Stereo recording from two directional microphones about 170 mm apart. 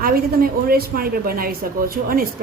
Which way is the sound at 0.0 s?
60° right (ahead or behind).